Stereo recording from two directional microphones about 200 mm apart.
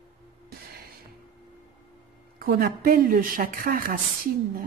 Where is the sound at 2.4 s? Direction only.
45° right (ahead or behind).